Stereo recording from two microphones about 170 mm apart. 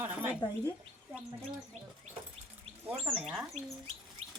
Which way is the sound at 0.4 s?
25° left (ahead or behind).